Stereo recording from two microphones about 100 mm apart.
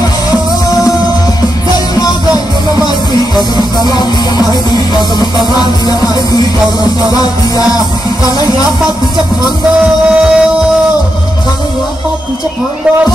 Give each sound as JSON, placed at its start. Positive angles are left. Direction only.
{"t": 2.0, "sound": "music", "side_deg": 40}
{"t": 10.0, "sound": "music", "side_deg": -10}